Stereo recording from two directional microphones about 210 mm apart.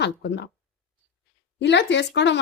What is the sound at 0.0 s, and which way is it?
Speech, 55° left (ahead or behind).